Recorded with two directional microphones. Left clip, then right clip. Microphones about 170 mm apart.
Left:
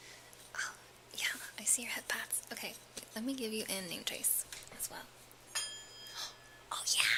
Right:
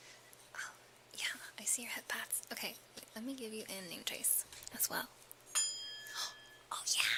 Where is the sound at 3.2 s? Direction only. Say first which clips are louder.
Left 6 dB; 5° left (ahead or behind).